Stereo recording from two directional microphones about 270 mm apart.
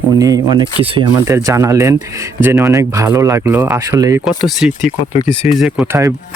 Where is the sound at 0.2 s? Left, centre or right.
Centre.